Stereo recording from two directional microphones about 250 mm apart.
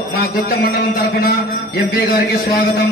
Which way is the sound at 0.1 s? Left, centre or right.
Left.